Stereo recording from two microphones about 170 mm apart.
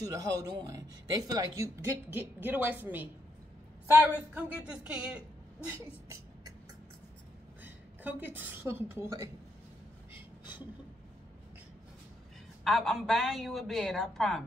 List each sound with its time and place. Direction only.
0.0 s speech: 20° right (ahead or behind)
7.6 s a woman's voice: 10° right (ahead or behind)
12.6 s a woman's voice: centre (ahead or behind)